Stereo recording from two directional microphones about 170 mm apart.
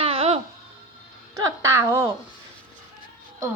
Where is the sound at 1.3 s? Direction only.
20° right (ahead or behind).